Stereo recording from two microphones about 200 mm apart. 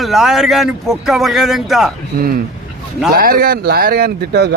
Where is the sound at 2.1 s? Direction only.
45° right (ahead or behind).